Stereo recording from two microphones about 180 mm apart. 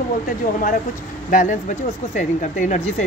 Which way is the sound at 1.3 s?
45° left (ahead or behind).